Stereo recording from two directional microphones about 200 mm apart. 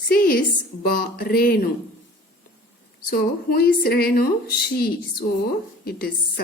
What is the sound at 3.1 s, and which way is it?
Speech, 50° left (ahead or behind).